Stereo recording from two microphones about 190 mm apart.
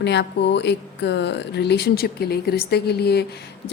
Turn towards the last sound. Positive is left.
turn(degrees=60)  # may be behind; listen again after turning